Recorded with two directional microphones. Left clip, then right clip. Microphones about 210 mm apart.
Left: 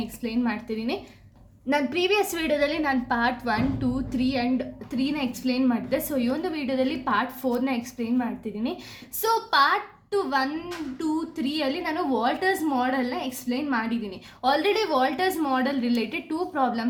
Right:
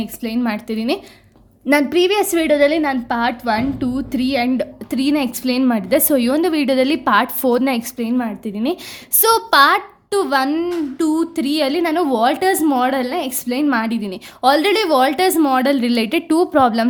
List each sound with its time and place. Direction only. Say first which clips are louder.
0.0 s a woman's voice: right 6 dB; 50° right (ahead or behind)